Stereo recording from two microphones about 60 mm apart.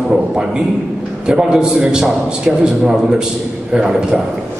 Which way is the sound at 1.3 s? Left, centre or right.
Centre.